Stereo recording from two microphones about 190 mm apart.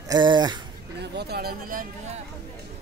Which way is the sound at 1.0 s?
60° right (ahead or behind).